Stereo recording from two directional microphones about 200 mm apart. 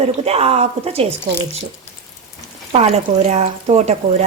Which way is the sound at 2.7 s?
35° right (ahead or behind).